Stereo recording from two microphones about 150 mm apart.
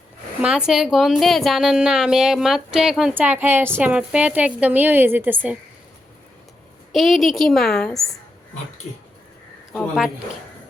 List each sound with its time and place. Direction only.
0.4 s a woman's voice: 5° right (ahead or behind)
6.9 s a woman's voice: centre (ahead or behind)